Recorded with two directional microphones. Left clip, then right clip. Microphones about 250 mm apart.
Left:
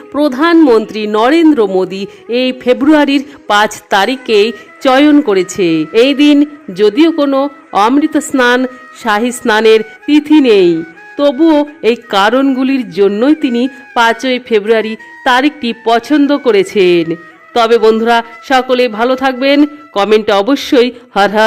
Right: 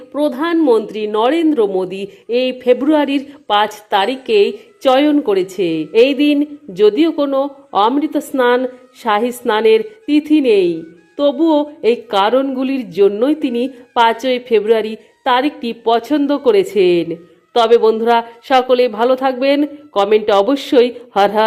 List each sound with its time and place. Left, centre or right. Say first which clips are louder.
0.1 s speech: left 7 dB; centre